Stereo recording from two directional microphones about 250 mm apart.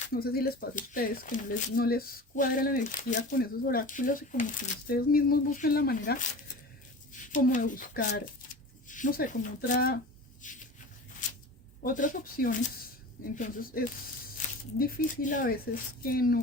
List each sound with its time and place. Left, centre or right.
0.1 s speech: left
7.3 s speech: left
11.8 s speech: left